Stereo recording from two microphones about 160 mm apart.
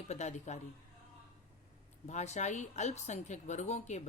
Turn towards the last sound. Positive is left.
turn(degrees=45)  # may be behind; listen again after turning